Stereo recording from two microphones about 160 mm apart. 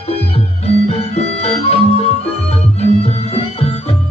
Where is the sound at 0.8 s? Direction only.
40° left (ahead or behind).